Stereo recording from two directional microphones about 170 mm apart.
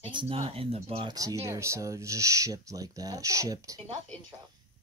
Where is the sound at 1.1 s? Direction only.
20° right (ahead or behind).